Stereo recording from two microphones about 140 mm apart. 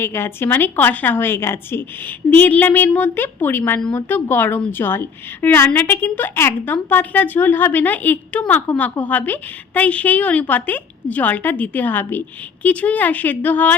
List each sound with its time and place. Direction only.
0.0 s a woman's voice: 15° left (ahead or behind)